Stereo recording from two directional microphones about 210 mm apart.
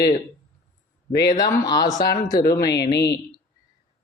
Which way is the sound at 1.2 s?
15° left (ahead or behind).